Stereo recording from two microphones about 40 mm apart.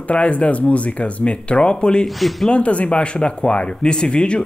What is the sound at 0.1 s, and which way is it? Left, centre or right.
Speech, left.